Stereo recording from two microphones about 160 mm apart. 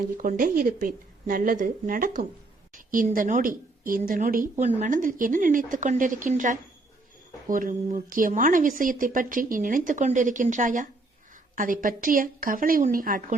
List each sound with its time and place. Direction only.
0.2 s a woman's voice: 60° right (ahead or behind)